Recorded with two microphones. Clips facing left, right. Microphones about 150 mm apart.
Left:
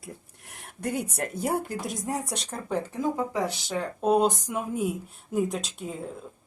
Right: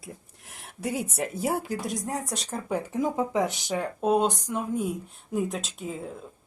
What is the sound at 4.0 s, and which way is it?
Speech, centre (ahead or behind).